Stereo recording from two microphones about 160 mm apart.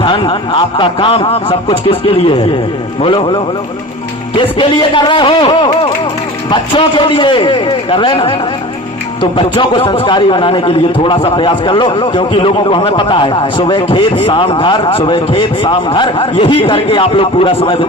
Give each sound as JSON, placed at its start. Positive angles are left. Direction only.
{"t": 0.0, "sound": "a man's voice", "side_deg": 30}